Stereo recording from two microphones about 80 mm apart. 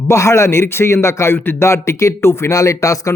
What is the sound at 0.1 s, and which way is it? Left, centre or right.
A man's voice, left.